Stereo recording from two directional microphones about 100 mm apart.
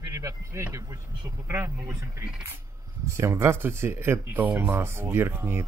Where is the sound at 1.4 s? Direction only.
25° right (ahead or behind).